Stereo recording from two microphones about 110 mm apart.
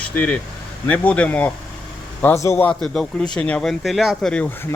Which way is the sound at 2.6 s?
5° left (ahead or behind).